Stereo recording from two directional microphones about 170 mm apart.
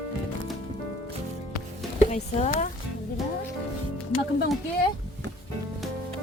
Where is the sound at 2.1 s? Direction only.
40° left (ahead or behind).